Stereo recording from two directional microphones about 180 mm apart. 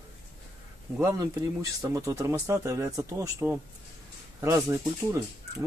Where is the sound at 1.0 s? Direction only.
15° right (ahead or behind).